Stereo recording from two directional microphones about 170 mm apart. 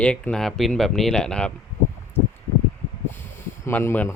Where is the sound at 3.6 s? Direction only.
15° left (ahead or behind).